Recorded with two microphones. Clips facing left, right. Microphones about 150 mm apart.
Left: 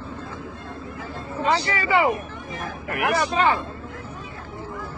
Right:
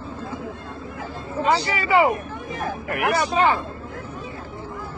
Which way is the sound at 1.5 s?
15° right (ahead or behind).